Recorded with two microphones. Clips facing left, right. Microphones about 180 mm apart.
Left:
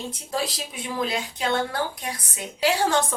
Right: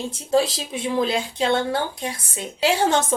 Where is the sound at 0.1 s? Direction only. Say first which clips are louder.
Right 9 dB; 25° right (ahead or behind).